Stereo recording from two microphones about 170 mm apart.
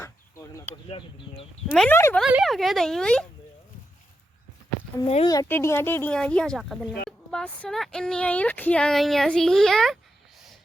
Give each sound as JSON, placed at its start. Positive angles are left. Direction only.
{"t": 0.0, "sound": "a sound", "side_deg": 15}
{"t": 0.9, "sound": "speech", "side_deg": 35}
{"t": 1.9, "sound": "speech", "side_deg": 15}
{"t": 2.1, "sound": "speech", "side_deg": 0}
{"t": 5.0, "sound": "speech", "side_deg": 35}
{"t": 5.3, "sound": "speech", "side_deg": 15}